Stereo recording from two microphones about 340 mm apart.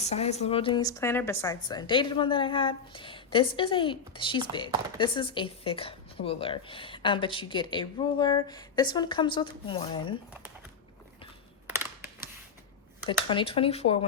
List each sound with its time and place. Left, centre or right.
0.0 s a woman's voice: centre
11.7 s a sound: centre
13.1 s a woman's voice: centre